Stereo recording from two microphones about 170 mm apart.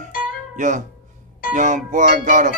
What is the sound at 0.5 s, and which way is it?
Speech, 50° right (ahead or behind).